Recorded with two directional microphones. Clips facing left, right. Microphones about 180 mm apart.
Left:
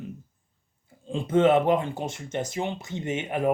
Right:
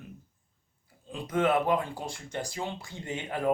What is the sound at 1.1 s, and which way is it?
Speech, 25° left (ahead or behind).